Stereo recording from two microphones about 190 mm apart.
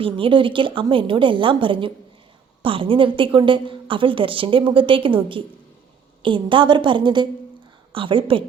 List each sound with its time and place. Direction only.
0.0 s a woman's voice: 25° right (ahead or behind)